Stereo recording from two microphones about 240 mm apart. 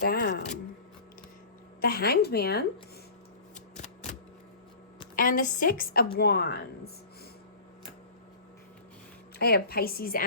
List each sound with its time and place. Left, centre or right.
0.0 s a sound: left
1.8 s a woman's voice: left
3.8 s typewriter: left
5.1 s a woman's voice: left
9.4 s a woman's voice: left